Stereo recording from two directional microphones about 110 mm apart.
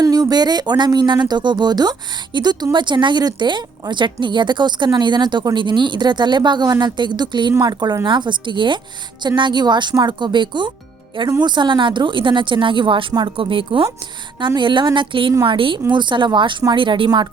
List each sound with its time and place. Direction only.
0.0 s a woman's voice: 35° right (ahead or behind)